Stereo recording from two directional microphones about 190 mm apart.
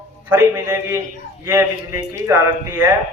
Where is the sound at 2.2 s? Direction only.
15° right (ahead or behind).